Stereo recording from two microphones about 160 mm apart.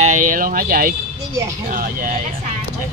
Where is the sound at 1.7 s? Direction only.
60° right (ahead or behind).